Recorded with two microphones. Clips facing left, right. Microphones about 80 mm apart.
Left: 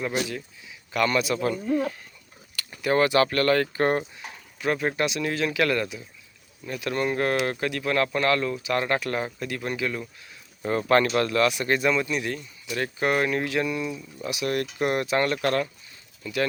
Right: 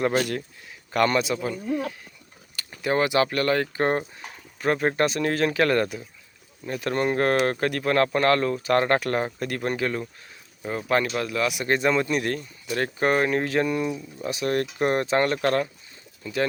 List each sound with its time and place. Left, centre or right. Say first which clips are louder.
0.9 s speech: right 2 dB; right
1.4 s speech: left 3 dB; centre
2.8 s speech: left 1 dB; right
4.6 s speech: right 3 dB; right
10.6 s speech: left 3 dB; centre
11.7 s speech: right 1 dB; right